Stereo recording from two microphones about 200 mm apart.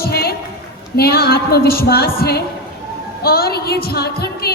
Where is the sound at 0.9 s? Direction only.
50° left (ahead or behind).